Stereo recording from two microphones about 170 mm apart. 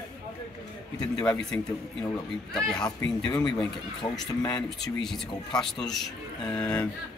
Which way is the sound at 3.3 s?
25° left (ahead or behind).